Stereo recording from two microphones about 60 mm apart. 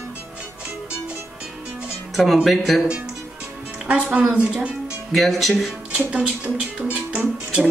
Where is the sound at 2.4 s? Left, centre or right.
Centre.